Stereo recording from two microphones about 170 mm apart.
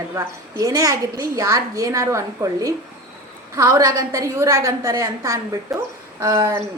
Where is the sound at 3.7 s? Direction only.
20° right (ahead or behind).